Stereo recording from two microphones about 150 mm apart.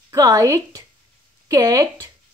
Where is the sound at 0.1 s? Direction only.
20° right (ahead or behind).